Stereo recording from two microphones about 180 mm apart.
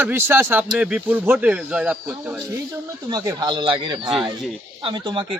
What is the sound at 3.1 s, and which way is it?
Speech, 20° right (ahead or behind).